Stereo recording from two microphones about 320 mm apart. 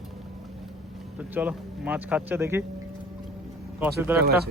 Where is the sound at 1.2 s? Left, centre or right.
Centre.